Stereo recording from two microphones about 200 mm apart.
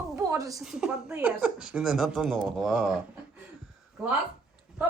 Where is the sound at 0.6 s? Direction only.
5° right (ahead or behind).